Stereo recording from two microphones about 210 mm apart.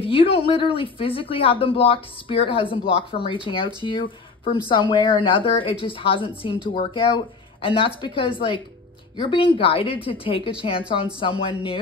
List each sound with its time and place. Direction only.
0.0 s speech: 25° left (ahead or behind)